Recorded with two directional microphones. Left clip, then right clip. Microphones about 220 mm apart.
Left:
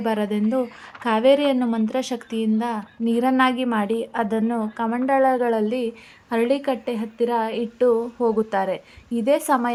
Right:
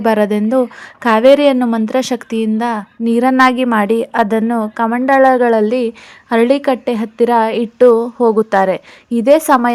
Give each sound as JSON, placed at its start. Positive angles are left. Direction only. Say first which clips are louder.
{"t": 0.0, "sound": "a woman's voice", "louder": "right 10 dB", "side_deg": -25}